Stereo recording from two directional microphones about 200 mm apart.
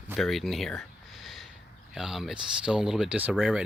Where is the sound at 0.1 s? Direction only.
Centre (ahead or behind).